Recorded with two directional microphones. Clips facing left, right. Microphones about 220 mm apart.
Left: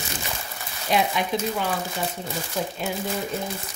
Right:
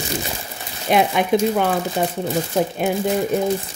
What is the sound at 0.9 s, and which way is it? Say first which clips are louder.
Speech: right 7 dB; 55° right (ahead or behind).